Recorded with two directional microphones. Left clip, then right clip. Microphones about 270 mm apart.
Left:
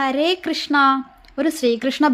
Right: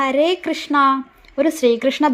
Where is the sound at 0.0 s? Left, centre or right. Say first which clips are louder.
Right 2 dB; centre.